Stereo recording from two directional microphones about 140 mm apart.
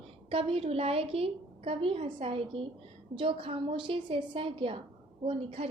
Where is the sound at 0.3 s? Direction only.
45° right (ahead or behind).